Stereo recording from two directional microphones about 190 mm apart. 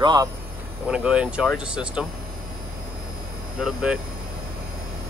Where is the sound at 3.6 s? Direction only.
5° right (ahead or behind).